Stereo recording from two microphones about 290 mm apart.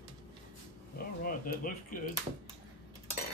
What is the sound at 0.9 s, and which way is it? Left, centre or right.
Speech, left.